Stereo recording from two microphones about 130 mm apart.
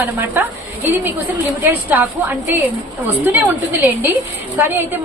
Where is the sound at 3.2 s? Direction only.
15° right (ahead or behind).